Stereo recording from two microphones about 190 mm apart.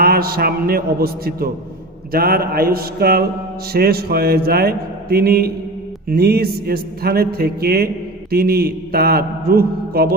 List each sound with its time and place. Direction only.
0.0 s a man's voice: 55° right (ahead or behind)